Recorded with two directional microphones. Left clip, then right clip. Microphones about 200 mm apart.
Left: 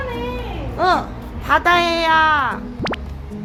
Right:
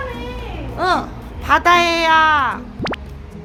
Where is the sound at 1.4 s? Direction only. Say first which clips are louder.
Right 2 dB; 25° right (ahead or behind).